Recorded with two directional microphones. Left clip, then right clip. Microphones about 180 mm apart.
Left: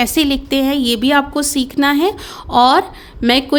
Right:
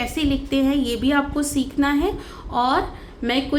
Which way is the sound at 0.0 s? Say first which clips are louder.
Left 8 dB; 60° left (ahead or behind).